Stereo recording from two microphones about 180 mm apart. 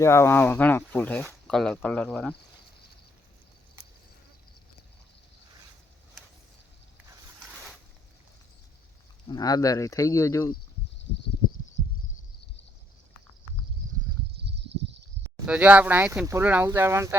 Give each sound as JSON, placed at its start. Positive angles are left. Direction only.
{"t": 0.0, "sound": "speech", "side_deg": 15}
{"t": 9.3, "sound": "speech", "side_deg": 20}
{"t": 14.3, "sound": "a sound", "side_deg": -70}
{"t": 15.4, "sound": "speech", "side_deg": -5}